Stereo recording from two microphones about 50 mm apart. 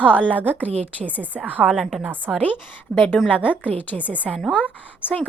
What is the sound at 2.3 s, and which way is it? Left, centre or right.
Speech, centre.